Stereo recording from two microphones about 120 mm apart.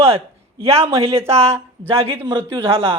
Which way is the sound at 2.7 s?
55° right (ahead or behind).